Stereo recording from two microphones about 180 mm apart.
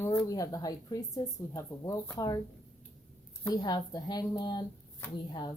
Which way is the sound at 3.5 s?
20° left (ahead or behind).